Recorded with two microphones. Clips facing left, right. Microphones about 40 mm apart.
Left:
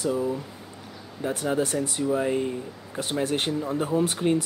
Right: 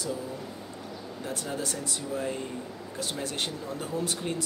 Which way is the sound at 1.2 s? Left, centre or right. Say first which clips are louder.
Left 9 dB; left.